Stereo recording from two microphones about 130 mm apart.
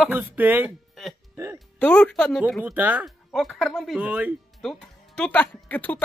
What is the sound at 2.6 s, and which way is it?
Speech, 10° right (ahead or behind).